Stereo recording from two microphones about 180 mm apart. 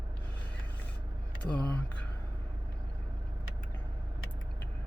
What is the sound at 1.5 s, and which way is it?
Speech, 10° left (ahead or behind).